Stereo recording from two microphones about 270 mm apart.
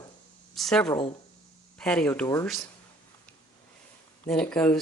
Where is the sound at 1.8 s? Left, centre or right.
Centre.